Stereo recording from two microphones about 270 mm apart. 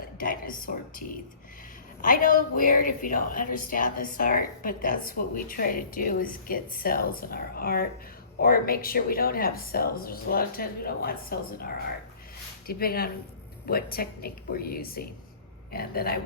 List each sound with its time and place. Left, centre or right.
0.2 s a woman's voice: left